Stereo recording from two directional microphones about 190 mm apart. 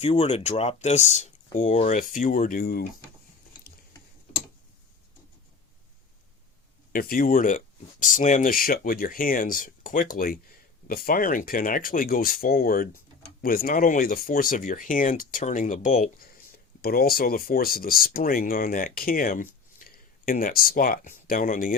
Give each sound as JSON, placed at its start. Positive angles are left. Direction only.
{"t": 0.0, "sound": "speech", "side_deg": 30}
{"t": 6.9, "sound": "speech", "side_deg": 50}